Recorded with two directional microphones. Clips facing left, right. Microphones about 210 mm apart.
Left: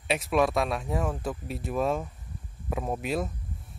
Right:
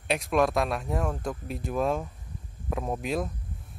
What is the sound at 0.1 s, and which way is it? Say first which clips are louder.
Speech: even; centre (ahead or behind).